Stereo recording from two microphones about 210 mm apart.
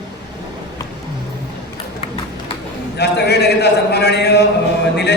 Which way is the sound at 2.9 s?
50° left (ahead or behind).